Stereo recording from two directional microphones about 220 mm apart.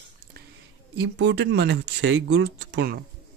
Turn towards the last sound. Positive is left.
turn(degrees=-50)  # may be behind; listen again after turning